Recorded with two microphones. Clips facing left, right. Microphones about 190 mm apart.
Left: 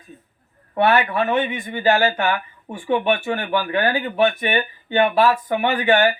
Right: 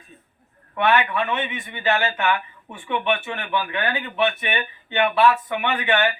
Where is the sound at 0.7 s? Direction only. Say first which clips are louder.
Left 3 dB; 40° left (ahead or behind).